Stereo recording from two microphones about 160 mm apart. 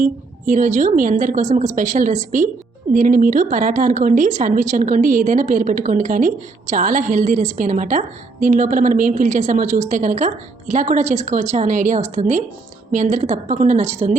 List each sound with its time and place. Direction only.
0.0 s speech: 55° right (ahead or behind)